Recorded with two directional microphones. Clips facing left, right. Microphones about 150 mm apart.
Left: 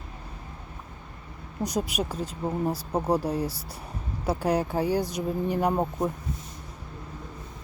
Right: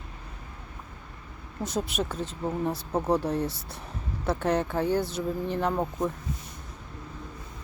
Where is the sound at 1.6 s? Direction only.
15° left (ahead or behind).